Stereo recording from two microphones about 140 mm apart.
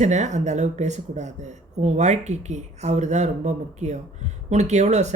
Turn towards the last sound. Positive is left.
turn(degrees=-55)  # may be behind; listen again after turning